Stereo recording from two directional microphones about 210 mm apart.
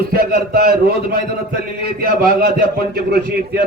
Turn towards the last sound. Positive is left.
turn(degrees=-50)  # may be behind; listen again after turning